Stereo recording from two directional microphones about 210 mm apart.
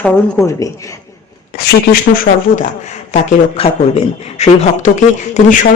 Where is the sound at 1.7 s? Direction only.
40° left (ahead or behind).